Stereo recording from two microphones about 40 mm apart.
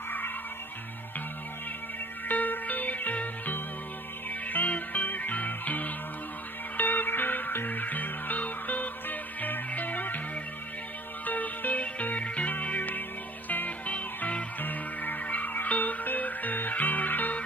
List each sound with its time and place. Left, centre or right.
2.2 s music: left
6.8 s music: left
11.2 s music: left
14.6 s music: left